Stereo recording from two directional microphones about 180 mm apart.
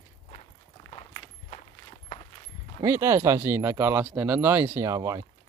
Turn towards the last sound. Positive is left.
turn(degrees=-20)  # may be behind; listen again after turning